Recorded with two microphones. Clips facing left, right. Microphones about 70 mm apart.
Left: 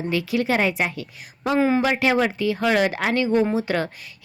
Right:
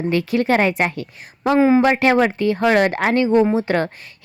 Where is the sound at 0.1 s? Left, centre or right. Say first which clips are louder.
Right 4 dB; right.